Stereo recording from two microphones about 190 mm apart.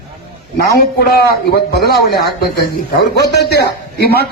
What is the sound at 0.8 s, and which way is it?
A man's voice, 55° left (ahead or behind).